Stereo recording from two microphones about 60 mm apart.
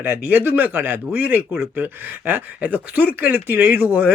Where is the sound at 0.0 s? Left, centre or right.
Right.